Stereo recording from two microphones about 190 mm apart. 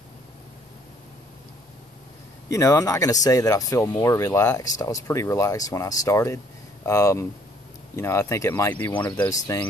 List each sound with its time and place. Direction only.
2.5 s speech: 15° left (ahead or behind)